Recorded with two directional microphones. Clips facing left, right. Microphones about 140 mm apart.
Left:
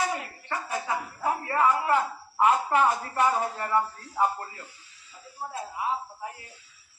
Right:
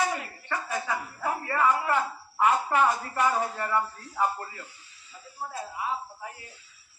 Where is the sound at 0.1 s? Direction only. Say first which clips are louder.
Even; 25° left (ahead or behind).